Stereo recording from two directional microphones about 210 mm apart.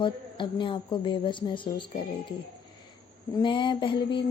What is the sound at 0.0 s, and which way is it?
Speech, 25° left (ahead or behind).